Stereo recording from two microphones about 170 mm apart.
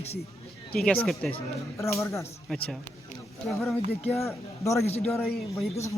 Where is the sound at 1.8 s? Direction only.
15° left (ahead or behind).